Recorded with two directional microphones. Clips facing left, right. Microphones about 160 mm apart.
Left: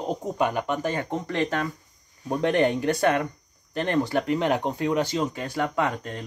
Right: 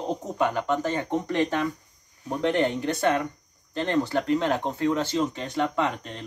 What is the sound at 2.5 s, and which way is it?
Speech, 15° left (ahead or behind).